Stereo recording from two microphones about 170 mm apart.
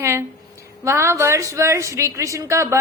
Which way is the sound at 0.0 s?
15° right (ahead or behind).